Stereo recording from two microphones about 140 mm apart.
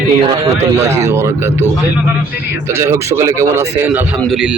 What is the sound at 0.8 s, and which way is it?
Speech, 20° right (ahead or behind).